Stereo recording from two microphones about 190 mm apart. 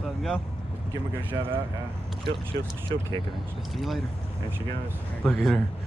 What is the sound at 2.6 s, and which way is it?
Speech, 65° right (ahead or behind).